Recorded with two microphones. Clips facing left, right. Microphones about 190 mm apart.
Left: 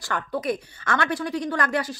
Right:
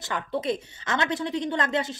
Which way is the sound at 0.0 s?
25° right (ahead or behind).